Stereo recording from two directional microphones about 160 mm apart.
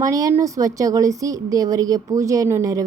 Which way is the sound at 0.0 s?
20° right (ahead or behind).